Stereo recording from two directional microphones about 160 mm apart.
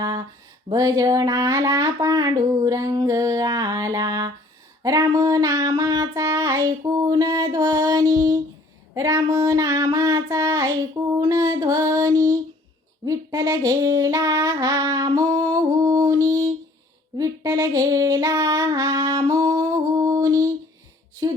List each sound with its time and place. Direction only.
0.0 s a sound: 20° right (ahead or behind)
0.7 s speech: 20° right (ahead or behind)
4.8 s child singing: 20° right (ahead or behind)
11.2 s female singing: 25° right (ahead or behind)
13.1 s a sound: 20° right (ahead or behind)
17.2 s female singing: 20° right (ahead or behind)